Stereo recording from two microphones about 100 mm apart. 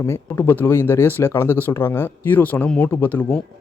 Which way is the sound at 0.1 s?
20° left (ahead or behind).